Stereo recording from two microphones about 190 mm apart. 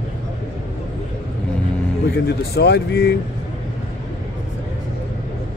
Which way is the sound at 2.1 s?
60° left (ahead or behind).